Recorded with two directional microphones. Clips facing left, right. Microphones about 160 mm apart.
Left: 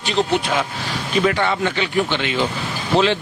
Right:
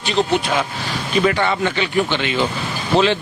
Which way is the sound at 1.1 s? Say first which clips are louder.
Right 1 dB; 20° right (ahead or behind).